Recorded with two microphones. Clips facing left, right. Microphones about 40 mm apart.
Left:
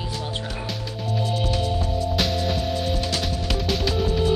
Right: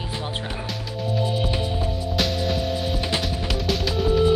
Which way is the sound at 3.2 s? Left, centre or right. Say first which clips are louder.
Even; centre.